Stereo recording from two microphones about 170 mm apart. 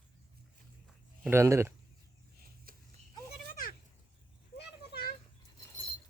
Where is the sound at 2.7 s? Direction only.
60° right (ahead or behind).